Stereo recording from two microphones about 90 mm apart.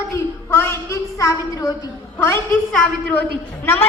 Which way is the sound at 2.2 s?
25° left (ahead or behind).